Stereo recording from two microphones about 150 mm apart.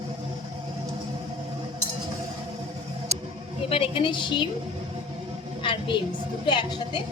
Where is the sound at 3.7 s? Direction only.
35° left (ahead or behind).